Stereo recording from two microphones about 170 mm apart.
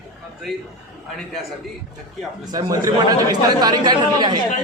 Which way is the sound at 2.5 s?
20° right (ahead or behind).